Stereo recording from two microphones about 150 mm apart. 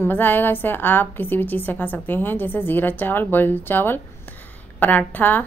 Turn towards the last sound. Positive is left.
turn(degrees=10)  # may be behind; listen again after turning